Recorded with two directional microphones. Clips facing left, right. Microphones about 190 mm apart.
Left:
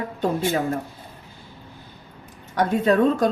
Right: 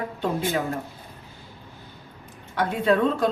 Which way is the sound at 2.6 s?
40° left (ahead or behind).